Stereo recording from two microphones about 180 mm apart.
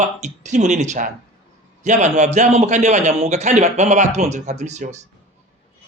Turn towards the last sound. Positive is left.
turn(degrees=-40)  # may be behind; listen again after turning